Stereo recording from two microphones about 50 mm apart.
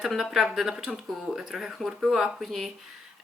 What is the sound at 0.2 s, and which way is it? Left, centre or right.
Speech, centre.